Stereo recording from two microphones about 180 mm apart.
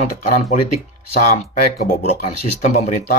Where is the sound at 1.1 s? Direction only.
35° left (ahead or behind).